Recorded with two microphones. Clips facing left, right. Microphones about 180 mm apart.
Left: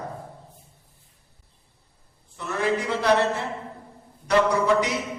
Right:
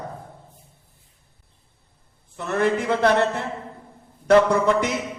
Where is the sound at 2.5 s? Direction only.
55° right (ahead or behind).